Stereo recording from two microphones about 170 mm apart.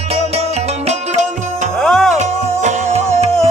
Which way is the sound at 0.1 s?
35° right (ahead or behind).